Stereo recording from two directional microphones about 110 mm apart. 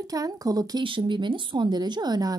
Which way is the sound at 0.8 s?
50° right (ahead or behind).